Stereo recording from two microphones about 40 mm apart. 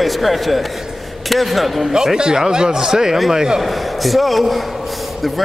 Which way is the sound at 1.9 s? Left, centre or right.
Centre.